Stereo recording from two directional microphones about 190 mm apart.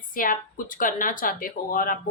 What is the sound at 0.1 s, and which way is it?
A woman's voice, 45° left (ahead or behind).